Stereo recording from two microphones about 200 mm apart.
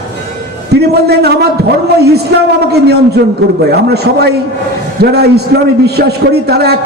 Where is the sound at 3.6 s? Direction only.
55° right (ahead or behind).